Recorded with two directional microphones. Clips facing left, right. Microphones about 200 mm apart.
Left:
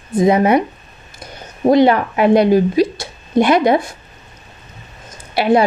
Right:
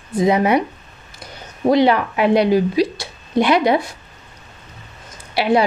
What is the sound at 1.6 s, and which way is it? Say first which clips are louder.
Speech: left 3 dB; 45° left (ahead or behind).